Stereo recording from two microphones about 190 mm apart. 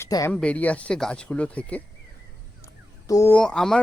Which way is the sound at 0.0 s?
15° left (ahead or behind).